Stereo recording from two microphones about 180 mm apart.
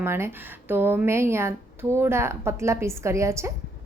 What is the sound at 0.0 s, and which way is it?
A woman's voice, 15° right (ahead or behind).